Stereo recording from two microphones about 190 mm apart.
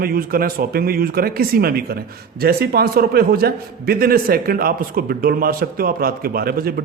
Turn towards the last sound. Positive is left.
turn(degrees=-55)  # may be behind; listen again after turning